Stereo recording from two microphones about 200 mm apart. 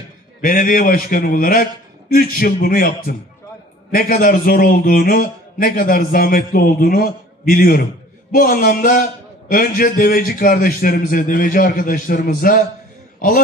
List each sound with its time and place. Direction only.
0.4 s a man's voice: 45° left (ahead or behind)